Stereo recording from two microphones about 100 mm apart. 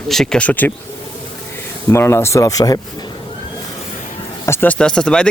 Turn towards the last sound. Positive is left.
turn(degrees=10)  # may be behind; listen again after turning